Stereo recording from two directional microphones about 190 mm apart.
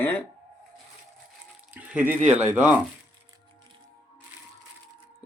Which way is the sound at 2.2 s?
40° right (ahead or behind).